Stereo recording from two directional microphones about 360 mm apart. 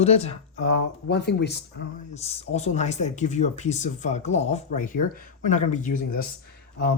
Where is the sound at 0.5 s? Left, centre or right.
Left.